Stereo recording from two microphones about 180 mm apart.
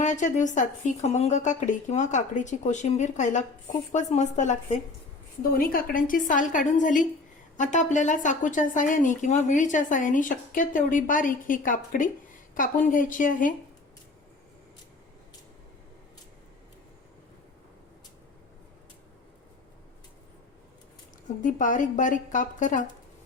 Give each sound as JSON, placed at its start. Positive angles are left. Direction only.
{"t": 0.0, "sound": "speech", "side_deg": 45}
{"t": 5.4, "sound": "speech", "side_deg": 50}
{"t": 21.4, "sound": "speech", "side_deg": 45}